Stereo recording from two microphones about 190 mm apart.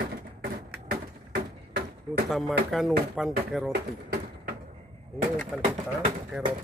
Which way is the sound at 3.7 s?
55° right (ahead or behind).